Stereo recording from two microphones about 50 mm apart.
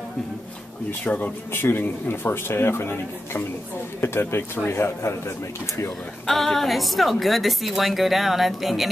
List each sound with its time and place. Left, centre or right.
1.0 s speech: left
1.5 s speech: left
6.2 s a woman's voice: centre